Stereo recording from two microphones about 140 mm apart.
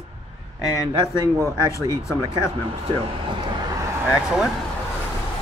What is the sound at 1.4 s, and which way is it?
Speech, 20° left (ahead or behind).